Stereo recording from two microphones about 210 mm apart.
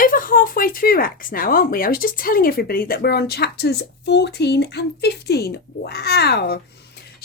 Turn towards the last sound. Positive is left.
turn(degrees=50)  # may be behind; listen again after turning